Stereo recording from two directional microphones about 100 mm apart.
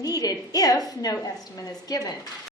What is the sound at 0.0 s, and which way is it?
A woman's voice, 40° left (ahead or behind).